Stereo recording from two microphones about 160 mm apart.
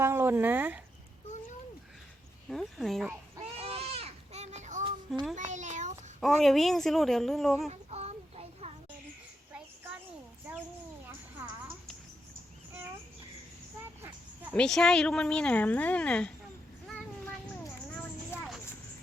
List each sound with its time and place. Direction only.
0.0 s speech: 15° right (ahead or behind)
2.5 s speech: centre (ahead or behind)
3.4 s goat: 40° right (ahead or behind)
5.3 s a sound: 50° right (ahead or behind)
6.1 s speech: centre (ahead or behind)
7.7 s child singing: 40° right (ahead or behind)
11.0 s music: 10° right (ahead or behind)
14.5 s a woman's voice: 5° left (ahead or behind)